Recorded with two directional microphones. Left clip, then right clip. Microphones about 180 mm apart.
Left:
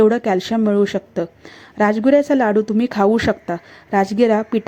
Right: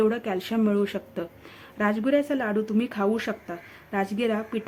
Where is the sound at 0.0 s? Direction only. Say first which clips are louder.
Left 10 dB; 30° left (ahead or behind).